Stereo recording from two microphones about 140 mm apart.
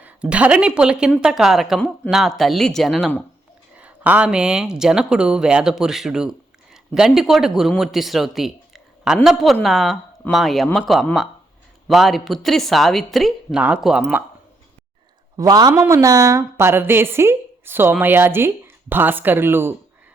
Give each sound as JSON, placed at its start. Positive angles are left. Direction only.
{"t": 0.0, "sound": "a woman's voice", "side_deg": -10}
{"t": 3.8, "sound": "speech", "side_deg": -10}
{"t": 15.4, "sound": "a man's voice", "side_deg": -25}